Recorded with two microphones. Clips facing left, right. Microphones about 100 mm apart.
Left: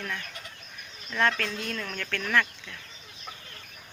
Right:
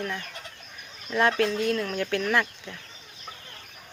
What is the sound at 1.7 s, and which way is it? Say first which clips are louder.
Speech: right 7 dB; 10° right (ahead or behind).